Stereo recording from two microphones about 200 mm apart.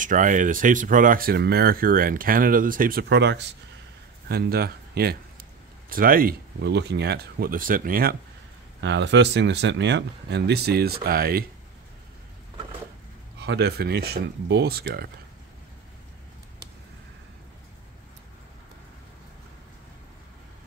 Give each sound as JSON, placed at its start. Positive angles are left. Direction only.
{"t": 0.0, "sound": "speech", "side_deg": -40}
{"t": 8.8, "sound": "speech", "side_deg": -60}
{"t": 13.4, "sound": "speech", "side_deg": -55}